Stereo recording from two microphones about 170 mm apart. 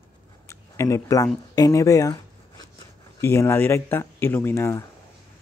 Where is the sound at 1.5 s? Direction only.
20° left (ahead or behind).